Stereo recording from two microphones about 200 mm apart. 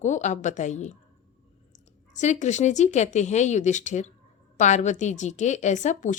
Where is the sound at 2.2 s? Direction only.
35° left (ahead or behind).